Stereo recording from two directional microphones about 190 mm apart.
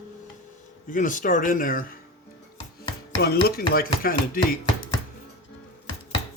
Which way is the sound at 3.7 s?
50° left (ahead or behind).